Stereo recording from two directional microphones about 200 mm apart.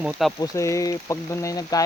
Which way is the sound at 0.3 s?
15° left (ahead or behind).